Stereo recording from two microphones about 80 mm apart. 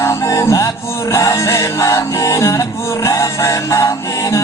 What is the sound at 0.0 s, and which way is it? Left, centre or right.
Music, left.